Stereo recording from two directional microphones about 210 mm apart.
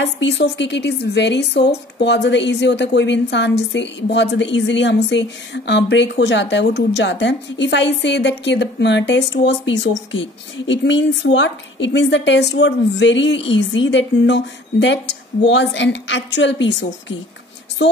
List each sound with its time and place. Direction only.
0.0 s a woman's voice: 55° left (ahead or behind)